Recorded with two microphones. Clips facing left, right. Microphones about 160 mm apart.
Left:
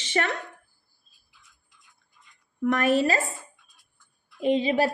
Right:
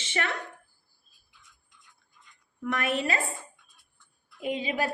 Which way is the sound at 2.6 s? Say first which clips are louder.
Left 7 dB; 40° left (ahead or behind).